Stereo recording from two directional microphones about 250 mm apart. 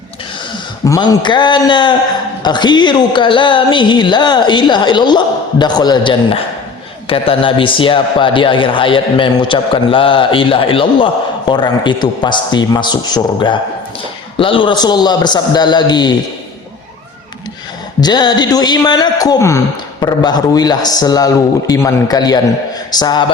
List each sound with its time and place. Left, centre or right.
0.9 s a man's voice: centre
18.0 s a man's voice: centre